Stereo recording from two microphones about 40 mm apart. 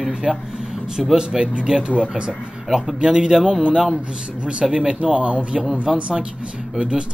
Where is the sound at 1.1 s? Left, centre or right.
Right.